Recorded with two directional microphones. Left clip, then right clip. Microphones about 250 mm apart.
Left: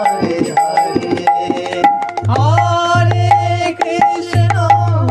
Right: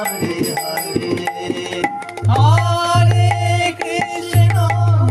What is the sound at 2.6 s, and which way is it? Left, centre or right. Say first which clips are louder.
Music: left 4 dB; right.